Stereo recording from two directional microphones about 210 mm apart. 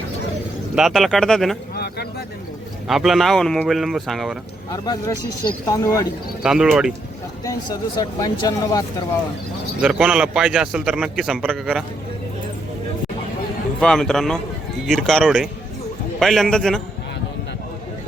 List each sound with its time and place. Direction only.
0.8 s a man's voice: centre (ahead or behind)
1.7 s a sound: 50° left (ahead or behind)
2.8 s a man's voice: centre (ahead or behind)
4.7 s speech: 15° left (ahead or behind)
6.4 s a man's voice: 5° right (ahead or behind)
7.4 s speech: 15° left (ahead or behind)
9.8 s a man's voice: 5° right (ahead or behind)
13.7 s a man's voice: centre (ahead or behind)